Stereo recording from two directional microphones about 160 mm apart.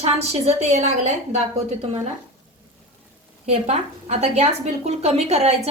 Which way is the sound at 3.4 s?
45° right (ahead or behind).